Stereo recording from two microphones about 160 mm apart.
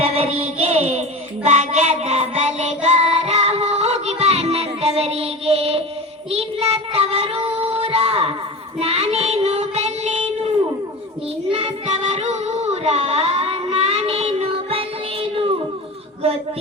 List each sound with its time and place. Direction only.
0.0 s music: 35° right (ahead or behind)
1.5 s child singing: 45° right (ahead or behind)
11.5 s child singing: 40° right (ahead or behind)